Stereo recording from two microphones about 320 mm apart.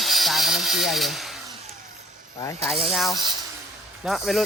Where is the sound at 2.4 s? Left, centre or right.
Centre.